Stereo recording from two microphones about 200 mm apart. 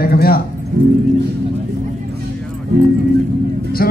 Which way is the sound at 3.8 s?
50° left (ahead or behind).